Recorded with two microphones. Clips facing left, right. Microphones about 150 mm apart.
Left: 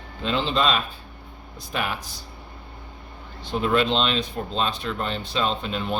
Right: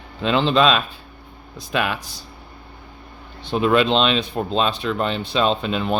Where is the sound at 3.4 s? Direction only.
70° right (ahead or behind).